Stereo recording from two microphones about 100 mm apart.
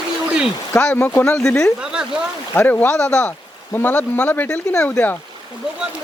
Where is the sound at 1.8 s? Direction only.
10° right (ahead or behind).